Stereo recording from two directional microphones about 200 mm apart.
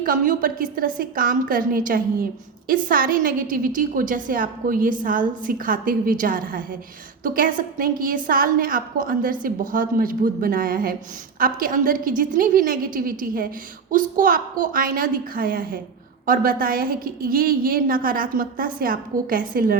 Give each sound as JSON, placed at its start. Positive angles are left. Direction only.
{"t": 0.0, "sound": "a woman's voice", "side_deg": -45}